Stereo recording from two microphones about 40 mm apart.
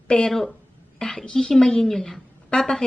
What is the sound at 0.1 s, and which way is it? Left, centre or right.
A woman's voice, left.